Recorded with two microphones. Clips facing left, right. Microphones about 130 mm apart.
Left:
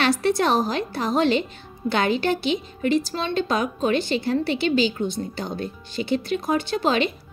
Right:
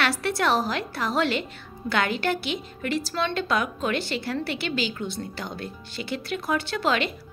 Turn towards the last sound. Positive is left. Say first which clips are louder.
# left 3 dB
turn(degrees=20)  # may be behind; listen again after turning